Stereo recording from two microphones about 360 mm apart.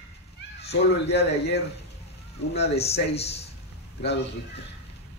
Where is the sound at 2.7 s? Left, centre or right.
Centre.